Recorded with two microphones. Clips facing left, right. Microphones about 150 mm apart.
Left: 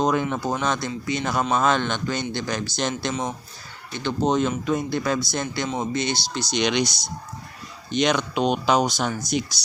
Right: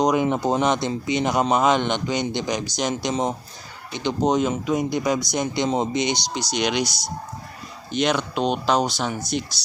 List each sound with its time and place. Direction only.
0.0 s speech: 15° right (ahead or behind)